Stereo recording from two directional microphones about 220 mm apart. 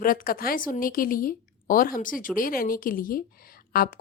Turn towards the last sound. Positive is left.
turn(degrees=40)  # may be behind; listen again after turning